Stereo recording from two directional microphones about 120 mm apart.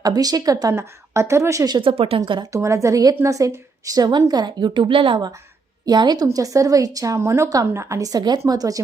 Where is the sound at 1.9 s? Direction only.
50° right (ahead or behind).